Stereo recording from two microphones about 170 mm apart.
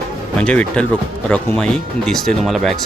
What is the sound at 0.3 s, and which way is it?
Speech, 10° left (ahead or behind).